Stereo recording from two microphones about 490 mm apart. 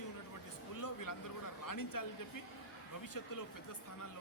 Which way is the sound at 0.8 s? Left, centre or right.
Left.